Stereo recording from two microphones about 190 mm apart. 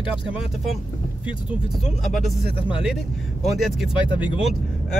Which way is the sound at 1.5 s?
Centre (ahead or behind).